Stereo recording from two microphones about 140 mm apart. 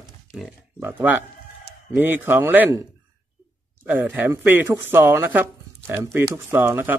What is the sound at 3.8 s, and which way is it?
Speech, 10° right (ahead or behind).